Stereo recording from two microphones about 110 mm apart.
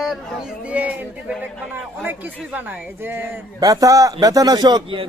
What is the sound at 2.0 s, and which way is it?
Speech, 15° right (ahead or behind).